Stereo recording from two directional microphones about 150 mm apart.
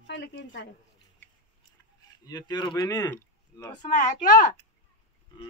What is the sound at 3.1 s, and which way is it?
Speech, 15° left (ahead or behind).